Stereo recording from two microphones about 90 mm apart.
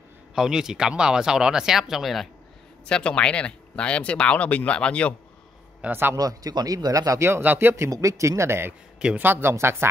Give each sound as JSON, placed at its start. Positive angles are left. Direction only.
{"t": 0.3, "sound": "speech", "side_deg": -5}
{"t": 2.9, "sound": "speech", "side_deg": 10}
{"t": 5.8, "sound": "a man's voice", "side_deg": -25}
{"t": 6.1, "sound": "a man's voice", "side_deg": -45}